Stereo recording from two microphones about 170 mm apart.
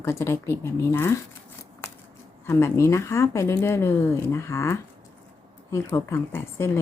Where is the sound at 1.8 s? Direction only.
10° left (ahead or behind).